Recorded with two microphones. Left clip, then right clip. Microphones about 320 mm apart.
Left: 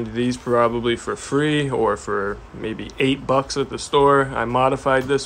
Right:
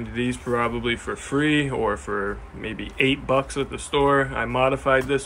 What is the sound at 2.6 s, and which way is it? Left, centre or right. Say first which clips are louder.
Speech: left 1 dB; left.